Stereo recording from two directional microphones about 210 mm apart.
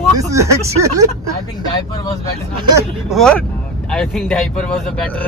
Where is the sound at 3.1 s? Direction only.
5° left (ahead or behind).